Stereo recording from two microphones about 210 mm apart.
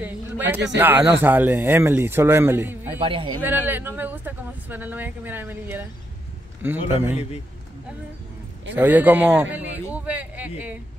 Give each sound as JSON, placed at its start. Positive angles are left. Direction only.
{"t": 0.0, "sound": "a sound", "side_deg": -10}
{"t": 0.7, "sound": "speech", "side_deg": -10}
{"t": 3.0, "sound": "a man's voice", "side_deg": -25}
{"t": 3.4, "sound": "speech", "side_deg": -10}
{"t": 8.7, "sound": "speech", "side_deg": -10}